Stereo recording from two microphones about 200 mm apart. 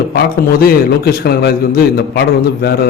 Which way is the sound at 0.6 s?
50° left (ahead or behind).